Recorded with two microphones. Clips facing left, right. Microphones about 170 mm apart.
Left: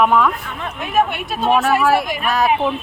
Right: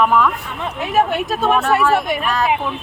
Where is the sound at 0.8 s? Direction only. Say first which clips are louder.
Right 1 dB; 40° right (ahead or behind).